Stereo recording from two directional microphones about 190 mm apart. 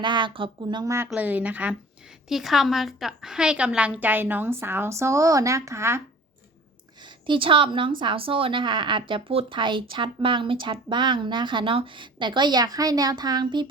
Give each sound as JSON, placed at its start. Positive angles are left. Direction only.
{"t": 0.0, "sound": "a woman's voice", "side_deg": -25}
{"t": 7.0, "sound": "speech", "side_deg": -25}